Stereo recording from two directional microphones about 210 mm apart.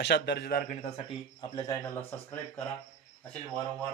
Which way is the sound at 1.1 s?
20° left (ahead or behind).